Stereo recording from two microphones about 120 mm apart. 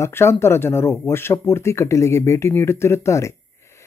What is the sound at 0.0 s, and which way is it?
Speech, 20° left (ahead or behind).